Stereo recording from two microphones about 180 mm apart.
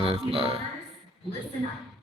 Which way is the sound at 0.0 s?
30° right (ahead or behind).